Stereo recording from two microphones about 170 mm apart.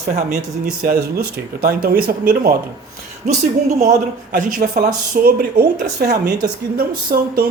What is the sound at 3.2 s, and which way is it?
Speech, 45° right (ahead or behind).